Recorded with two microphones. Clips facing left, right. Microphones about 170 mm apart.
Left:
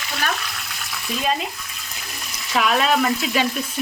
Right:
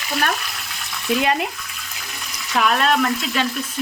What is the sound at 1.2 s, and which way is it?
Speech, 65° right (ahead or behind).